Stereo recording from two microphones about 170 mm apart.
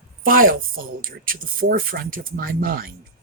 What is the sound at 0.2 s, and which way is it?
Speech, 55° right (ahead or behind).